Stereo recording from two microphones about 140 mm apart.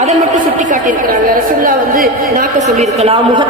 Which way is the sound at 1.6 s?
90° right.